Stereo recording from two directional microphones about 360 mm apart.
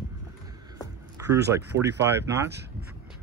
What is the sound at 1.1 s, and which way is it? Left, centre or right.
Speech, centre.